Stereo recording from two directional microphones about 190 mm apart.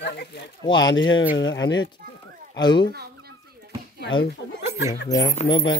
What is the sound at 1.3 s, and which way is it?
Speech, 70° left (ahead or behind).